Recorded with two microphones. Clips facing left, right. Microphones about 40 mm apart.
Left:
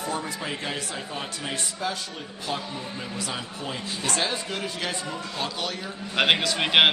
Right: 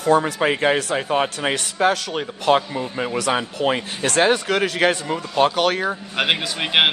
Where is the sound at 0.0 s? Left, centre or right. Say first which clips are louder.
Right 13 dB; right.